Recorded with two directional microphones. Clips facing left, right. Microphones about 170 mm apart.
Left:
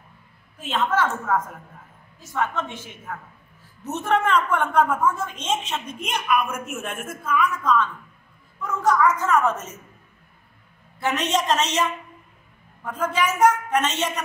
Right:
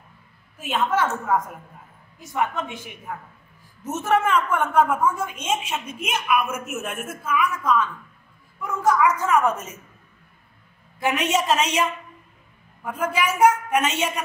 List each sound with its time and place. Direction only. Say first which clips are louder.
0.6 s a woman's voice: even; 10° right (ahead or behind)
11.0 s a woman's voice: right 1 dB; 10° right (ahead or behind)
12.8 s a woman's voice: even; 10° right (ahead or behind)